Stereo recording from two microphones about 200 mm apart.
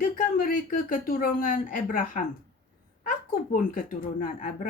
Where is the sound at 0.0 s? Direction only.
45° left (ahead or behind).